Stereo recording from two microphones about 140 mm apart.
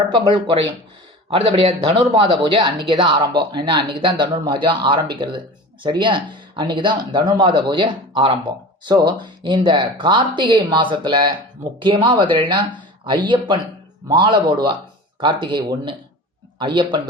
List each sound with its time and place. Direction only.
0.1 s speech: 35° right (ahead or behind)